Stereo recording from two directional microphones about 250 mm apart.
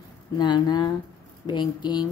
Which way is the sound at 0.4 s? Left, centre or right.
Centre.